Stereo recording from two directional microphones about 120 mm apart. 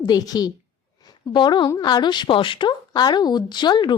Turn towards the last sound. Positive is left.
turn(degrees=40)  # may be behind; listen again after turning